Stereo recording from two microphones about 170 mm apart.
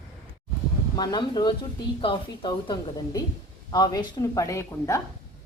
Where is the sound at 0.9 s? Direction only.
25° left (ahead or behind).